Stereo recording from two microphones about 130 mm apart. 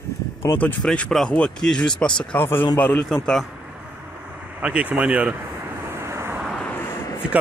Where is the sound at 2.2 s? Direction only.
15° left (ahead or behind).